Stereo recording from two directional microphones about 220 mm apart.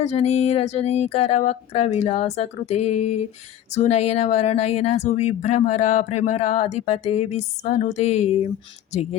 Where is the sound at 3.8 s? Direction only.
30° left (ahead or behind).